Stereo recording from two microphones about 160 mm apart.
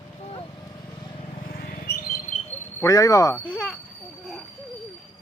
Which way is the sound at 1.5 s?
65° left (ahead or behind).